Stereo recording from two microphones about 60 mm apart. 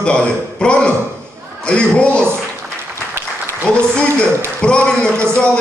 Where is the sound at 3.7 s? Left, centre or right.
Centre.